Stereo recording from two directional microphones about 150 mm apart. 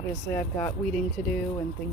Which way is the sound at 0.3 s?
15° left (ahead or behind).